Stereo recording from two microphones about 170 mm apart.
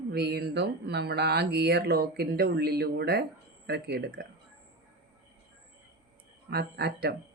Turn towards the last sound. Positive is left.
turn(degrees=-70)  # may be behind; listen again after turning